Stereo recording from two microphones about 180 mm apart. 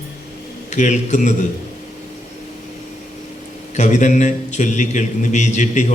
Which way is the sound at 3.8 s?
45° left (ahead or behind).